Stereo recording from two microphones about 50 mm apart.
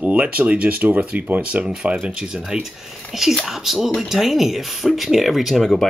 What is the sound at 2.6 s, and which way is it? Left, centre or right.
Speech, centre.